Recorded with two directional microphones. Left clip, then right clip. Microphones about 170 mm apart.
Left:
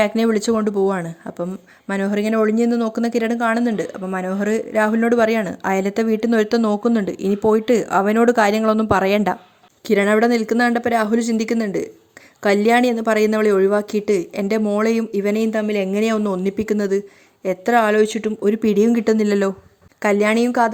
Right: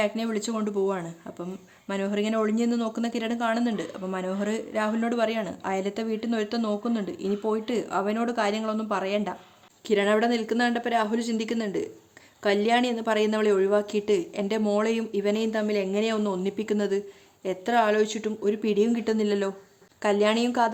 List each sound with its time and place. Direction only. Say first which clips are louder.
0.0 s speech: left 10 dB; 45° left (ahead or behind)
9.8 s speech: left 7 dB; 35° left (ahead or behind)